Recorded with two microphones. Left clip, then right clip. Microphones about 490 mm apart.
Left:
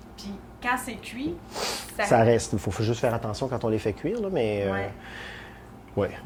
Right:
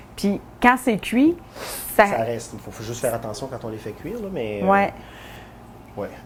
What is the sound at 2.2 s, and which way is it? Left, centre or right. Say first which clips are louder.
Speech: left 4 dB; left.